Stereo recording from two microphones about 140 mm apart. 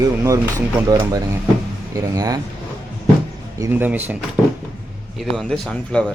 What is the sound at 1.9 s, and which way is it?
Speech, 25° right (ahead or behind).